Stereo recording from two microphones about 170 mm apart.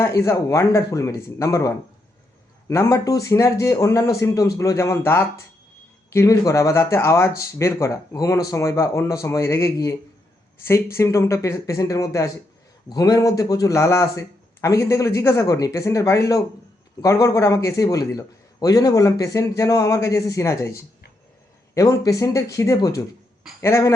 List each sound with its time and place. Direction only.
0.0 s a man's voice: 15° left (ahead or behind)